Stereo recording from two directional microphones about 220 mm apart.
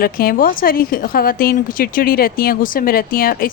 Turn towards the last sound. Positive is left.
turn(degrees=40)  # may be behind; listen again after turning